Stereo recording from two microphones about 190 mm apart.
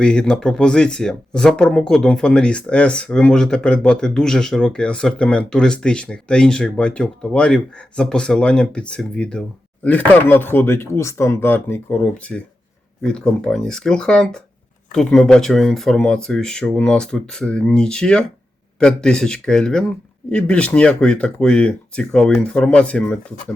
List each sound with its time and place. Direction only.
0.0 s speech: 5° left (ahead or behind)